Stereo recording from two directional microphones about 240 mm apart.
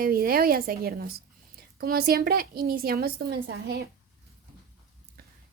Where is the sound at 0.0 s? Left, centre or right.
Right.